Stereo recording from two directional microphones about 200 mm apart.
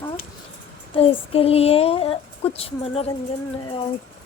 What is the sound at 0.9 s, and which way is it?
A woman's voice, 30° left (ahead or behind).